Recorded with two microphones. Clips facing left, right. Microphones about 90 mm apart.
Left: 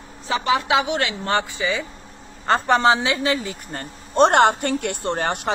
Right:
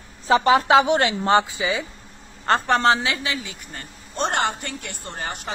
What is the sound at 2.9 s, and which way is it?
A woman's voice, 25° left (ahead or behind).